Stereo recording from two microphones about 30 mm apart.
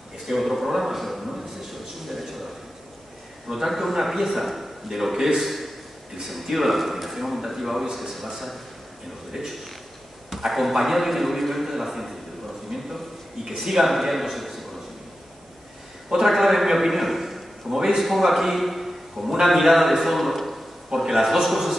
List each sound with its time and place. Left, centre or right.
0.3 s a sound: centre
3.4 s a man's voice: centre
5.4 s a sound: centre
6.2 s a man's voice: centre
16.1 s a man's voice: centre
16.3 s a man's voice: centre
17.6 s a man's voice: centre
18.0 s a man's voice: centre
20.2 s a sound: centre
20.9 s a man's voice: centre